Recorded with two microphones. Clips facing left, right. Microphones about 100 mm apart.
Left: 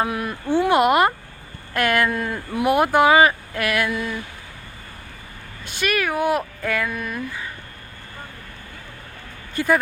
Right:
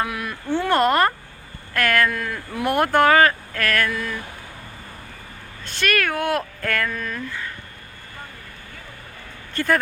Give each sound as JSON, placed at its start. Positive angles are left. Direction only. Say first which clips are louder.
{"t": 0.0, "sound": "speech", "louder": "left 3 dB", "side_deg": 25}
{"t": 0.4, "sound": "speech", "louder": "left 2 dB", "side_deg": 15}
{"t": 2.7, "sound": "speech", "louder": "even", "side_deg": 10}
{"t": 5.6, "sound": "speech", "louder": "even", "side_deg": 10}
{"t": 9.6, "sound": "speech", "louder": "left 1 dB", "side_deg": 10}